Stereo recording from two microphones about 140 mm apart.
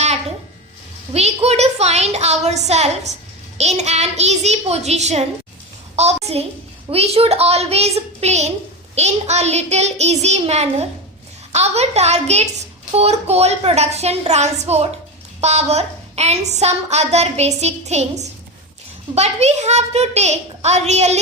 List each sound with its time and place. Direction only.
1.1 s a woman's voice: 50° right (ahead or behind)
6.2 s a woman's voice: 45° right (ahead or behind)